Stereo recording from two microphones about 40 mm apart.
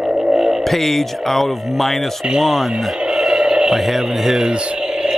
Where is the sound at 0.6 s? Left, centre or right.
Centre.